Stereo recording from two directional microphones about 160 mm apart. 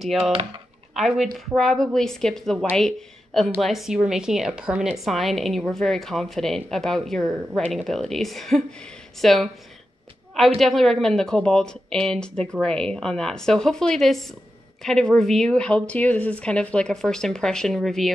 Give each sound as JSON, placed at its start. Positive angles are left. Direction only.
{"t": 0.2, "sound": "speech", "side_deg": -35}
{"t": 0.9, "sound": "a woman's voice", "side_deg": 0}
{"t": 3.6, "sound": "a woman's voice", "side_deg": 0}